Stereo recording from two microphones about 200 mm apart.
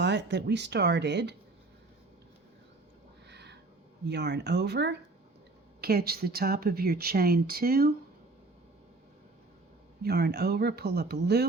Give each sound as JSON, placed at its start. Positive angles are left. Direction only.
{"t": 0.0, "sound": "speech", "side_deg": -60}
{"t": 3.2, "sound": "a sound", "side_deg": -55}
{"t": 4.0, "sound": "speech", "side_deg": -60}
{"t": 10.0, "sound": "speech", "side_deg": -50}